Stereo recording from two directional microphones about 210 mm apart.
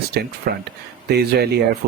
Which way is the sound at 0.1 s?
50° right (ahead or behind).